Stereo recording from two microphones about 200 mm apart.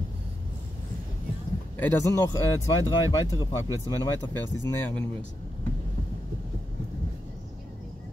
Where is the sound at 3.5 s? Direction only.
15° right (ahead or behind).